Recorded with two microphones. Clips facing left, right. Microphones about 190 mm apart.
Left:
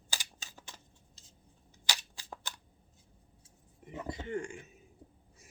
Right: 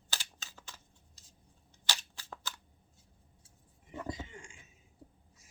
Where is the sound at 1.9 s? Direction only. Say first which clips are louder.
Left 1 dB; 15° left (ahead or behind).